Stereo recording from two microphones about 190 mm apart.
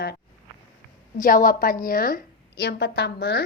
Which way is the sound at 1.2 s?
45° left (ahead or behind).